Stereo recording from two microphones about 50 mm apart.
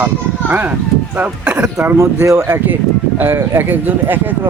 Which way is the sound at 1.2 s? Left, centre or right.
Right.